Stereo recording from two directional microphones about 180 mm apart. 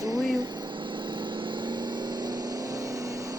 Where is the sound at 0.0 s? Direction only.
20° right (ahead or behind).